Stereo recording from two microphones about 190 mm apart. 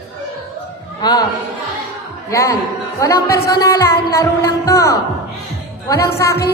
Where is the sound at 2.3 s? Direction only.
15° left (ahead or behind).